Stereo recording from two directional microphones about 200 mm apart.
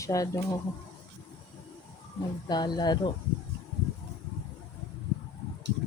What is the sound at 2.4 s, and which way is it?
Speech, 20° left (ahead or behind).